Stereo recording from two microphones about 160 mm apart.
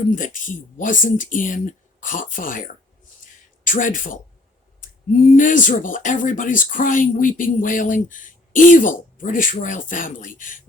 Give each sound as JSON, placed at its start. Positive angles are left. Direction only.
{"t": 0.2, "sound": "speech", "side_deg": 55}
{"t": 5.3, "sound": "speech", "side_deg": 55}